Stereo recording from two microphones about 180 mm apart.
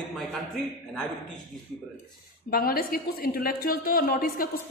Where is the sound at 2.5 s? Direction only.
55° left (ahead or behind).